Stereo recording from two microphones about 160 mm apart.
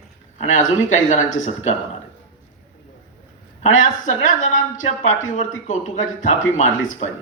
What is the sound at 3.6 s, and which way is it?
Speech, 50° left (ahead or behind).